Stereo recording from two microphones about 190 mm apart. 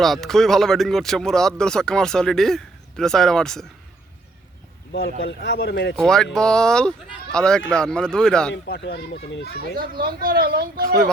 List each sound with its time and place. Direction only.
0.0 s speech: centre (ahead or behind)
4.9 s a child's voice: 60° left (ahead or behind)
6.0 s speech: 5° left (ahead or behind)
8.5 s a child's voice: 65° left (ahead or behind)
9.7 s speech: 50° right (ahead or behind)